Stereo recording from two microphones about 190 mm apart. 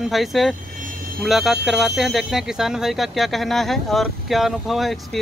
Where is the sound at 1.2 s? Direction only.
Centre (ahead or behind).